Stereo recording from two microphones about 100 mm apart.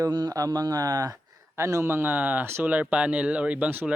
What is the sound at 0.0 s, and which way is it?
A man's voice, 40° right (ahead or behind).